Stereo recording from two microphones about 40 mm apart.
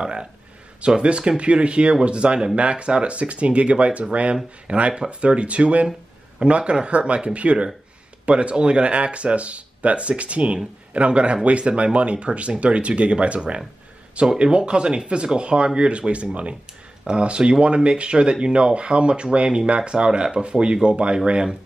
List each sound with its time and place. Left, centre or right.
0.0 s speech: right
14.2 s speech: centre